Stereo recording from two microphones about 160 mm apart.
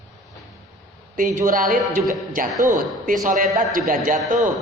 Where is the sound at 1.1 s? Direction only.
55° right (ahead or behind).